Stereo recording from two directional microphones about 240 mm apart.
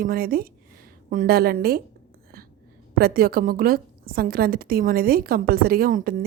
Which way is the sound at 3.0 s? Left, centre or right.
Right.